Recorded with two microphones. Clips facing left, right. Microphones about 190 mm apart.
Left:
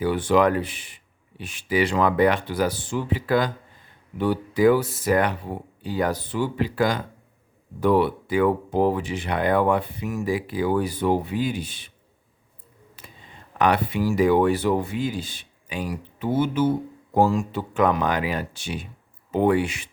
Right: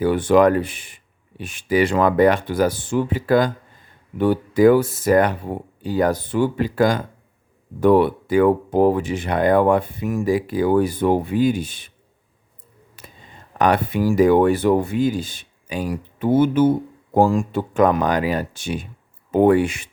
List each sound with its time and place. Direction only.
0.0 s speech: 50° right (ahead or behind)
13.0 s a sound: 45° right (ahead or behind)
13.6 s speech: 45° right (ahead or behind)